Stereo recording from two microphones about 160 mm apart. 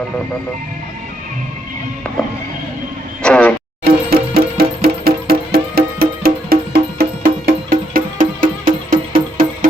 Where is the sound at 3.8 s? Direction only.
85° right; by 9.7 s 60° right (ahead or behind).